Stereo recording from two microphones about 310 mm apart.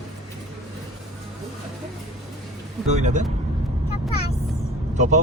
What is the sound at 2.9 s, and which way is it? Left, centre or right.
Speech, right.